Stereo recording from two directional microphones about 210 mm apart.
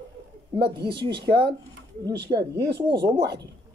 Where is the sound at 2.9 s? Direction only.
20° right (ahead or behind).